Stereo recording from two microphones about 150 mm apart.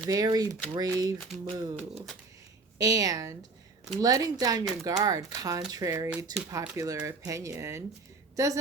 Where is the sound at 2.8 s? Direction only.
25° right (ahead or behind).